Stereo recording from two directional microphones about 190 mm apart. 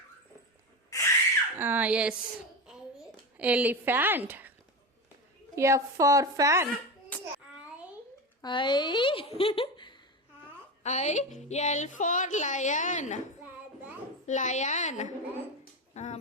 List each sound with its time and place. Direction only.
0.9 s a sound: 15° left (ahead or behind)
1.5 s a woman's voice: 10° right (ahead or behind)
3.3 s a woman's voice: 10° right (ahead or behind)
5.5 s a woman's voice: 15° right (ahead or behind)
7.1 s a sound: 5° left (ahead or behind)
8.4 s speech: 25° left (ahead or behind)
10.8 s a woman's voice: 35° left (ahead or behind)
14.3 s a woman's voice: 40° left (ahead or behind)
15.9 s a sound: 35° left (ahead or behind)